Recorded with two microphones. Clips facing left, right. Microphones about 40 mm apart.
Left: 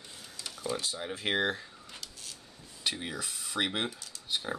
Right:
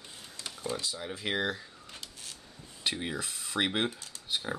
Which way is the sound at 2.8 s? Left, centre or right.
Centre.